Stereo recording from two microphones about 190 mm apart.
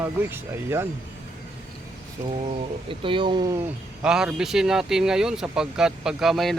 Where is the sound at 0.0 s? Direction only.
10° right (ahead or behind).